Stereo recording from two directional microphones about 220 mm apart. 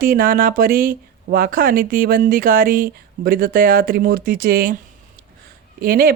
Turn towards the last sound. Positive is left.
turn(degrees=-45)  # may be behind; listen again after turning